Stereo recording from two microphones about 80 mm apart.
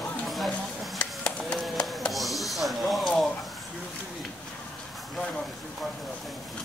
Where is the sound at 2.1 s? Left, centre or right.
Centre.